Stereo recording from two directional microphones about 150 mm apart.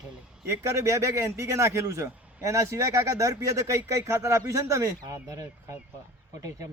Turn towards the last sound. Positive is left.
turn(degrees=-20)  # may be behind; listen again after turning